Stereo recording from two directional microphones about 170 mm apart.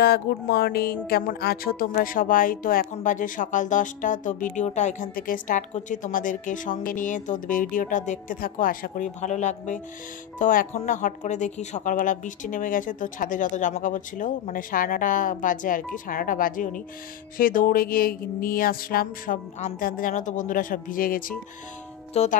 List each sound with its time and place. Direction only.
0.0 s music: 70° left (ahead or behind)
1.0 s speech: 65° left (ahead or behind); by 5.0 s 45° left (ahead or behind)
5.1 s speech: 55° left (ahead or behind)
22.1 s music: 40° left (ahead or behind)